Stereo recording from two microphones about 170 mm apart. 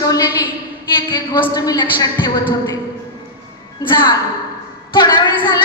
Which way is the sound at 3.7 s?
25° left (ahead or behind).